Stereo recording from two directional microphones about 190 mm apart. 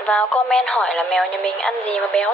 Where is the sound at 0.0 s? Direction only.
5° left (ahead or behind).